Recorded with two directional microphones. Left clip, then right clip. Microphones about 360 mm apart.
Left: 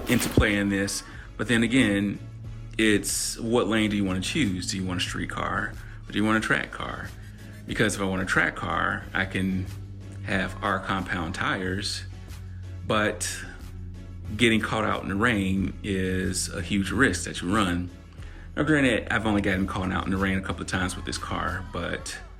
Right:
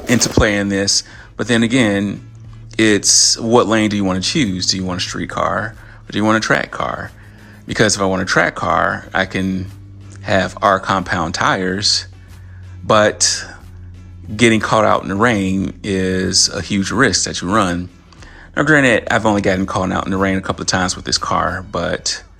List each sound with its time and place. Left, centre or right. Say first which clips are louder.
0.1 s speech: right 9 dB; centre